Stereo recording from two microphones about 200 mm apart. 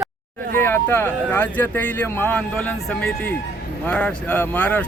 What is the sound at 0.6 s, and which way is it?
Speech, 10° left (ahead or behind).